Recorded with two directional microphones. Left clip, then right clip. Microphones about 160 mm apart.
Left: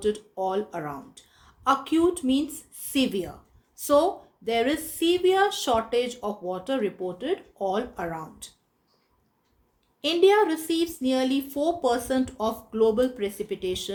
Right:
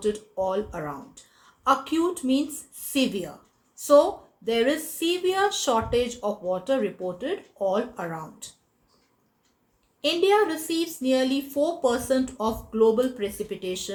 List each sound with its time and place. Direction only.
0.0 s a woman's voice: 45° left (ahead or behind)
10.0 s speech: 50° left (ahead or behind)